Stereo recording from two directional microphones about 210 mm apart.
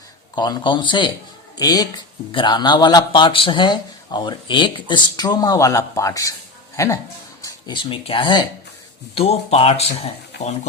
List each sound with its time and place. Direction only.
0.3 s speech: 20° left (ahead or behind)